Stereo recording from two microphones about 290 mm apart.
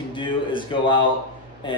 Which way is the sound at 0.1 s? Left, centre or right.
Centre.